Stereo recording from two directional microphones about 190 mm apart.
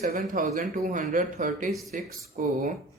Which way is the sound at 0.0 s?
35° right (ahead or behind).